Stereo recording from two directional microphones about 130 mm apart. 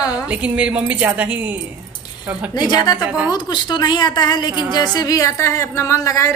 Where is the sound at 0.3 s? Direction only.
10° right (ahead or behind).